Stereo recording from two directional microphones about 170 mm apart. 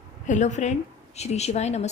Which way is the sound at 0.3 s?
45° left (ahead or behind).